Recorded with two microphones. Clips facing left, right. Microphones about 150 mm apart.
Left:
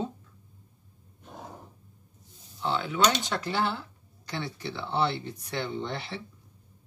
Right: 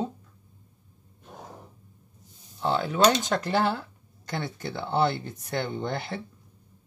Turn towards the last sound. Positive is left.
turn(degrees=-45)  # may be behind; listen again after turning